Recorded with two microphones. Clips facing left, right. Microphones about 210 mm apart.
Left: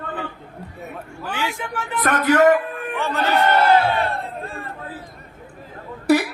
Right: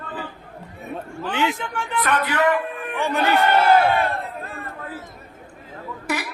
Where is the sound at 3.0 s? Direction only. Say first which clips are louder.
Right 2 dB; 15° right (ahead or behind).